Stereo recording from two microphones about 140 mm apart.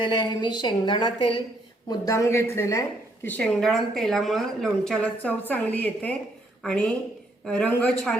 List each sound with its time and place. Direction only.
0.0 s a woman's voice: 35° left (ahead or behind)
1.9 s a woman's voice: 20° left (ahead or behind)
3.2 s a woman's voice: 10° left (ahead or behind)